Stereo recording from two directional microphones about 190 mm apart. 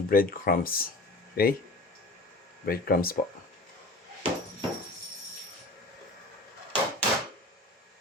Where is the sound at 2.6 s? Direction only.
50° left (ahead or behind).